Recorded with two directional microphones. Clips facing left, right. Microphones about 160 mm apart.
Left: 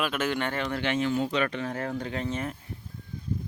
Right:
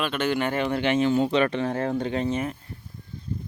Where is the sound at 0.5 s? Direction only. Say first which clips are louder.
Right 5 dB; 15° right (ahead or behind).